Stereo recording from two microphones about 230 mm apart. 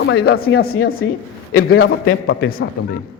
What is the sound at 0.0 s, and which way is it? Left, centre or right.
Speech, left.